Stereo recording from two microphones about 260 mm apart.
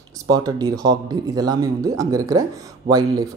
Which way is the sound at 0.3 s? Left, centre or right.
Centre.